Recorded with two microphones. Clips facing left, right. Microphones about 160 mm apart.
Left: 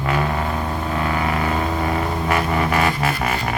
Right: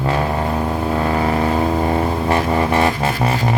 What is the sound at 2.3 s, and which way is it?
Music, 30° right (ahead or behind).